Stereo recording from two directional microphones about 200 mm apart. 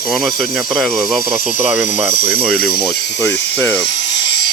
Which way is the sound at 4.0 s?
55° left (ahead or behind).